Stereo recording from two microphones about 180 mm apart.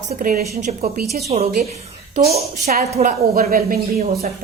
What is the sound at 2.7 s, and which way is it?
A woman's voice, 50° right (ahead or behind).